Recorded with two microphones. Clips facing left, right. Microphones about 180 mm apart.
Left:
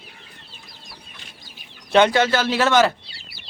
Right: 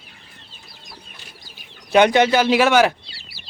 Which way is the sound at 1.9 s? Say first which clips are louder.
Right 2 dB; 15° right (ahead or behind).